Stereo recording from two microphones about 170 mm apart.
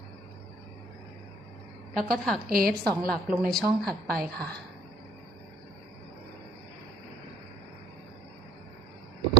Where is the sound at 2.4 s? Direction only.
60° right (ahead or behind).